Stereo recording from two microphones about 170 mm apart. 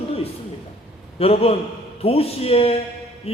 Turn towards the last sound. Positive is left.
turn(degrees=35)  # may be behind; listen again after turning